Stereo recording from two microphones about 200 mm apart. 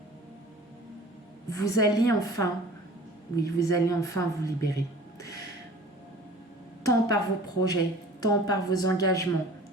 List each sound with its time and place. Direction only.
1.5 s a woman's voice: 15° left (ahead or behind)
6.8 s a woman's voice: 20° left (ahead or behind)